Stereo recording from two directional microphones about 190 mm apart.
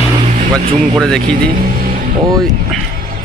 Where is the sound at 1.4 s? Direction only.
45° right (ahead or behind).